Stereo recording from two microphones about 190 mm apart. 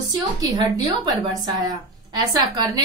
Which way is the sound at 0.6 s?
20° right (ahead or behind).